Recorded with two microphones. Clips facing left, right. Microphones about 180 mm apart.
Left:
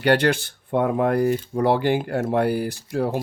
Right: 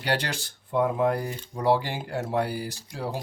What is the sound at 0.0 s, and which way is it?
Speech, 60° left (ahead or behind).